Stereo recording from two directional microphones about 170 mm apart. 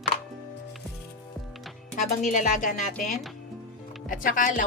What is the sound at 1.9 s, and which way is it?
Speech, 45° left (ahead or behind).